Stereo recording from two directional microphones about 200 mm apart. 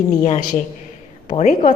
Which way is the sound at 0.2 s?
40° left (ahead or behind).